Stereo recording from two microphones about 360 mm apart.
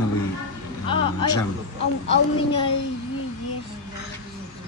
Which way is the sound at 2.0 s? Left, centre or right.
Left.